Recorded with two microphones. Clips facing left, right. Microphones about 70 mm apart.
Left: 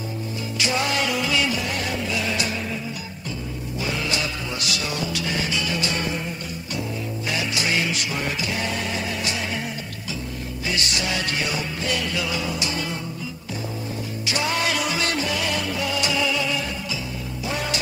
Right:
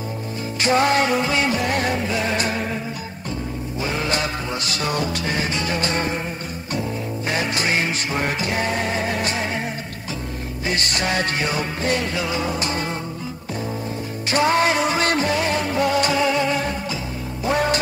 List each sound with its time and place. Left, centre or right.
0.6 s music: right
3.8 s music: right
7.2 s music: right
10.7 s music: right
14.2 s music: right